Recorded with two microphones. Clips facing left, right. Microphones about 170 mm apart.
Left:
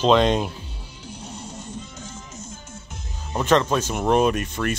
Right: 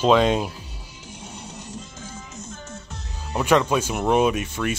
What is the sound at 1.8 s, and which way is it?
Music, 50° right (ahead or behind).